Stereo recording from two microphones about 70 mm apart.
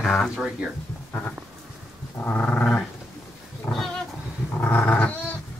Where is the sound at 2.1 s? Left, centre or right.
Left.